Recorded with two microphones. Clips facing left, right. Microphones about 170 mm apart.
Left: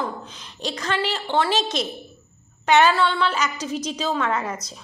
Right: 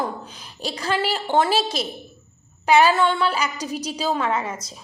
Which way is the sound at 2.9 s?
45° right (ahead or behind).